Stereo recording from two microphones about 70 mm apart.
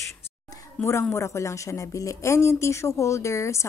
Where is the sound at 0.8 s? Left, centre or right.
Left.